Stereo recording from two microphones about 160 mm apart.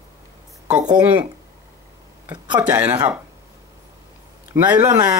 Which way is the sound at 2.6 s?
10° right (ahead or behind).